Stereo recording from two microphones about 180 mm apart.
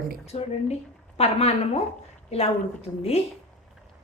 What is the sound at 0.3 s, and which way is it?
A woman's voice, 35° left (ahead or behind).